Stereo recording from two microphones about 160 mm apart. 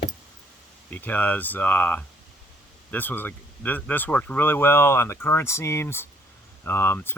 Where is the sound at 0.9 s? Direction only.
10° left (ahead or behind).